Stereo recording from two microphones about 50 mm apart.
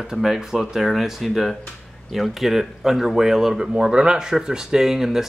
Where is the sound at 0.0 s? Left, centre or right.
Centre.